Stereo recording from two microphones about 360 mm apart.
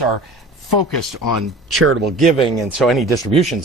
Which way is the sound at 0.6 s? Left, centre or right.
Right.